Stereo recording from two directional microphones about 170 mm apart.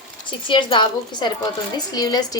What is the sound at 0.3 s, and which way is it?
A woman's voice, 30° left (ahead or behind).